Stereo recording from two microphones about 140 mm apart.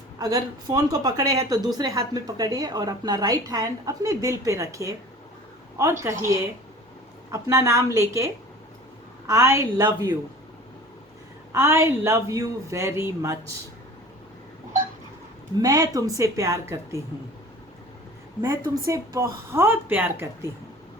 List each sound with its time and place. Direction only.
0.2 s a woman's voice: 25° right (ahead or behind)
11.5 s a woman's voice: 20° right (ahead or behind)
15.5 s a woman's voice: 25° right (ahead or behind)
18.4 s a woman's voice: 25° right (ahead or behind)